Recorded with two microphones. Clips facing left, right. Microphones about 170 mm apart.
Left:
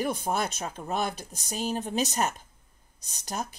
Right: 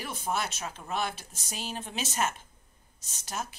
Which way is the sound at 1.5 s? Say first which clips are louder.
Left 8 dB; 45° left (ahead or behind).